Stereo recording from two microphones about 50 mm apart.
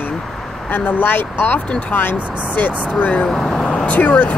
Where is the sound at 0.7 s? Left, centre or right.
Left.